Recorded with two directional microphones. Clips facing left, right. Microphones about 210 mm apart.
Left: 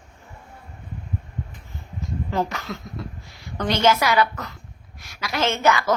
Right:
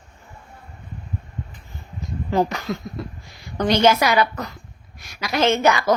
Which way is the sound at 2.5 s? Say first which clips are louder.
Right 5 dB; 15° right (ahead or behind).